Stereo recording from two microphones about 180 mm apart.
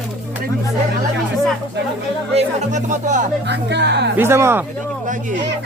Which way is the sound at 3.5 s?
70° right (ahead or behind).